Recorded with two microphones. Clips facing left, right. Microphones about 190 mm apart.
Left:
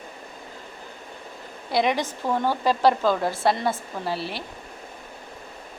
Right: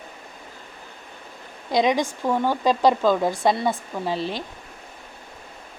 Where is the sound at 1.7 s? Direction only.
15° right (ahead or behind).